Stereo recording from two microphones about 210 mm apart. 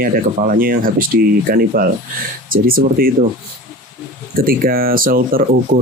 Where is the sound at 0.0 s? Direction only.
45° right (ahead or behind).